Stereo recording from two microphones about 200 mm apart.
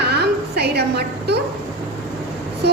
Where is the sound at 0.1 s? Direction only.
55° right (ahead or behind).